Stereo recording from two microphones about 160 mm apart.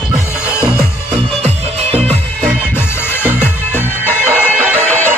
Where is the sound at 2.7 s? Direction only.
15° left (ahead or behind).